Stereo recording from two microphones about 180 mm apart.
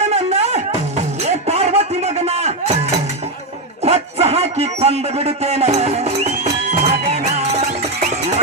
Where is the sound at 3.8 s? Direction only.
35° right (ahead or behind).